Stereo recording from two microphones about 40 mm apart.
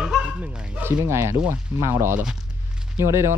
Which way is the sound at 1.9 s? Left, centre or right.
Right.